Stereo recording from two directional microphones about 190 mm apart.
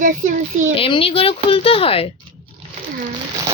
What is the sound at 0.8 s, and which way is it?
Speech, 30° left (ahead or behind).